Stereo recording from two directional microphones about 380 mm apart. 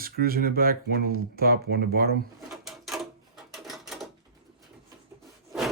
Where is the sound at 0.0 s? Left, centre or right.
Right.